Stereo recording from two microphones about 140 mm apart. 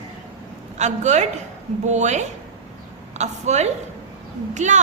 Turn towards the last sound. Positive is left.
turn(degrees=-60)  # may be behind; listen again after turning